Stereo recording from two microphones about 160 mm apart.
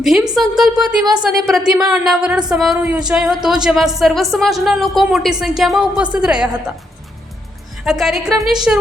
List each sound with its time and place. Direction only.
0.0 s speech: centre (ahead or behind)
7.9 s a woman's voice: centre (ahead or behind)